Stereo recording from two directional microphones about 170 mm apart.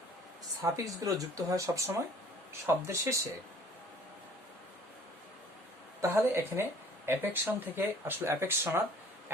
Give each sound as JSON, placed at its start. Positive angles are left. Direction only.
{"t": 0.6, "sound": "speech", "side_deg": -20}
{"t": 6.0, "sound": "speech", "side_deg": -15}